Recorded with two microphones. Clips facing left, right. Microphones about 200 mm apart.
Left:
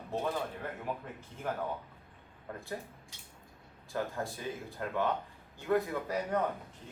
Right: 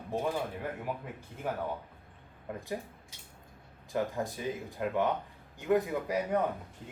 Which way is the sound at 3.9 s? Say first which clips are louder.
Right 3 dB; 15° right (ahead or behind).